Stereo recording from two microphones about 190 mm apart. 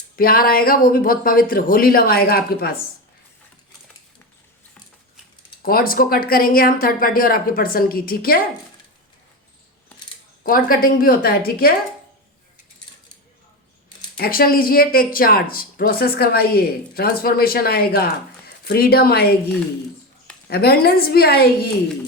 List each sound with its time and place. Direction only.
0.2 s speech: 50° left (ahead or behind)
5.6 s speech: 50° left (ahead or behind)
10.4 s speech: 50° left (ahead or behind)
14.2 s speech: 50° left (ahead or behind)
20.5 s a woman's voice: 55° left (ahead or behind)